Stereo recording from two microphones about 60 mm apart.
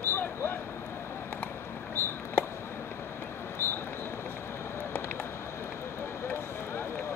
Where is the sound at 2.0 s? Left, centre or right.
Left.